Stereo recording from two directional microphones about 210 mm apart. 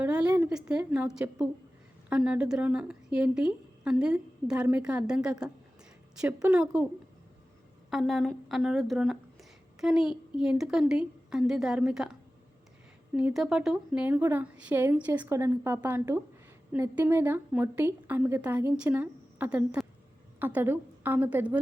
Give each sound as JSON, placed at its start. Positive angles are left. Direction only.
{"t": 0.0, "sound": "a woman's voice", "side_deg": -5}
{"t": 7.9, "sound": "a woman's voice", "side_deg": 0}
{"t": 13.1, "sound": "a woman's voice", "side_deg": -5}